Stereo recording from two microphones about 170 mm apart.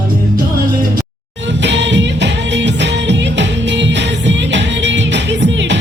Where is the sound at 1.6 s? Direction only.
90° right.